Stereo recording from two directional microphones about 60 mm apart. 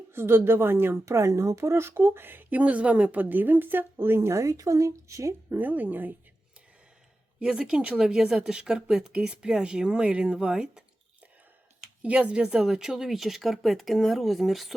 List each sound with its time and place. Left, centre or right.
0.1 s a woman's voice: right
5.5 s speech: right
7.3 s speech: centre
12.0 s speech: centre